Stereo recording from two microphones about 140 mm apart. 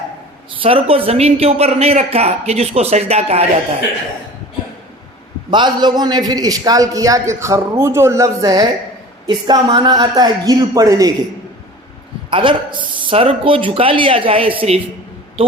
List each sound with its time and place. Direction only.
0.6 s speech: 40° right (ahead or behind)
5.5 s a man's voice: 30° right (ahead or behind)
12.3 s a man's voice: 35° right (ahead or behind)